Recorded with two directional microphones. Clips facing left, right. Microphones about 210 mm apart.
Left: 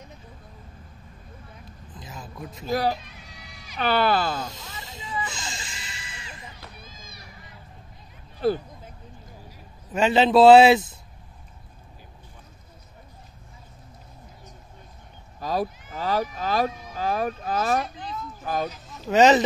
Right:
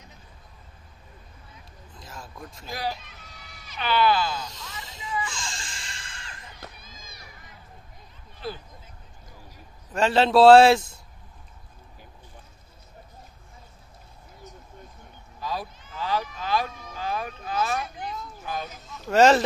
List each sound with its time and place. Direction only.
2.0 s a man's voice: 5° left (ahead or behind)
2.7 s speech: 40° left (ahead or behind)
4.5 s speech: 25° left (ahead or behind)
5.2 s a sound: 25° left (ahead or behind)
5.6 s music: 5° left (ahead or behind)
8.4 s speech: 45° left (ahead or behind)
9.9 s a man's voice: 5° left (ahead or behind)
15.4 s fowl: 40° left (ahead or behind)
18.4 s a sound: 45° left (ahead or behind)
19.0 s a man's voice: centre (ahead or behind)